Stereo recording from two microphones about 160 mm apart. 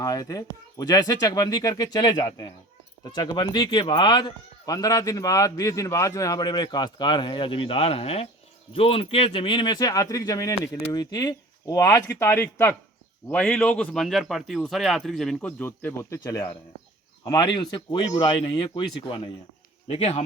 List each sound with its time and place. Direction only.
0.0 s speech: 20° left (ahead or behind); by 20.2 s 40° left (ahead or behind)